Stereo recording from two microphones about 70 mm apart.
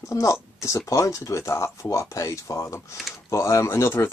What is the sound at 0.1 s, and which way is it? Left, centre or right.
Speech, left.